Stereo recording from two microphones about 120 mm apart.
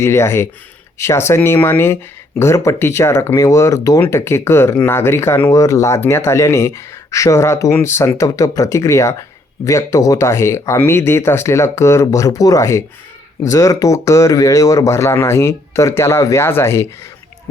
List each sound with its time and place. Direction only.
0.0 s speech: 20° left (ahead or behind)